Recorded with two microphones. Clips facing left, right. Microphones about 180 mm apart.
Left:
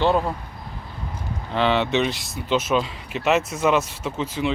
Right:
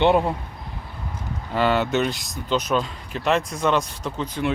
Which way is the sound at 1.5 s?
5° right (ahead or behind).